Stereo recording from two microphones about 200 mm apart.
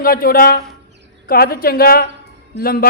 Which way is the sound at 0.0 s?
45° left (ahead or behind).